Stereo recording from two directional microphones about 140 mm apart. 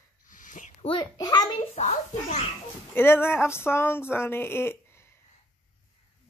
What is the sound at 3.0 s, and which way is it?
A woman's voice, 15° left (ahead or behind).